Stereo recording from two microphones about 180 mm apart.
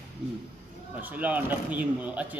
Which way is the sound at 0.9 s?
10° right (ahead or behind).